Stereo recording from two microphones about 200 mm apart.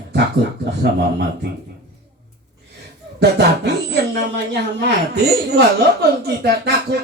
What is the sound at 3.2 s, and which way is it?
Speech, 55° right (ahead or behind).